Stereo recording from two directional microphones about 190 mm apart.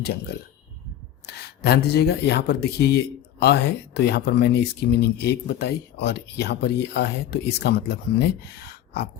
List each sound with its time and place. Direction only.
0.0 s speech: 60° left (ahead or behind)